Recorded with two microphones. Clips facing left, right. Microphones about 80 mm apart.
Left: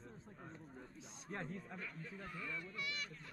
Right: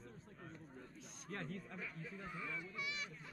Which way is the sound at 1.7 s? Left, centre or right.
Centre.